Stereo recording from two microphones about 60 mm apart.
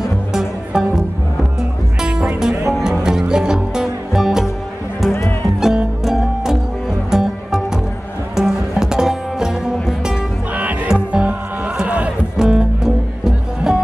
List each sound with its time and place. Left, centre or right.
0.0 s music: centre
2.0 s music: centre
5.6 s music: centre
10.5 s music: right
11.7 s a sound: right
12.4 s music: centre